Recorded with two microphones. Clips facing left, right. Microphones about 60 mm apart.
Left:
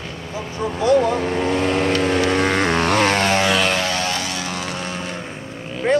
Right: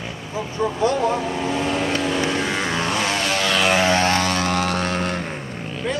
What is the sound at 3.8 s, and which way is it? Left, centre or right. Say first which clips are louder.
Vehicle: right 5 dB; right.